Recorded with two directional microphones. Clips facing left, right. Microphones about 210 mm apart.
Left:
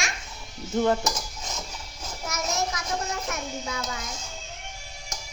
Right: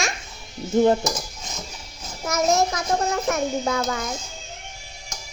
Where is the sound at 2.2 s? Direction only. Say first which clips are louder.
Right 9 dB; 50° right (ahead or behind).